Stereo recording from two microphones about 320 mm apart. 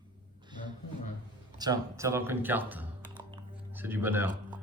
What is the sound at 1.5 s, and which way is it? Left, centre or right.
Speech, centre.